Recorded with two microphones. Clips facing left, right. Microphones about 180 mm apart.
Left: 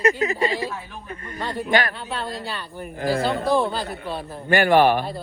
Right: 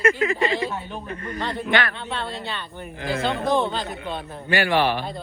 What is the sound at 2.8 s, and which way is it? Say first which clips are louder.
Speech: left 8 dB; 50° left (ahead or behind).